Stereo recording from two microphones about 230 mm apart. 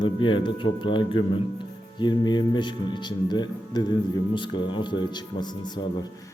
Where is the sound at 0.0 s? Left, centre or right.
Left.